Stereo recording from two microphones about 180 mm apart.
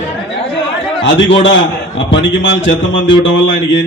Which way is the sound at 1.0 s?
90° left.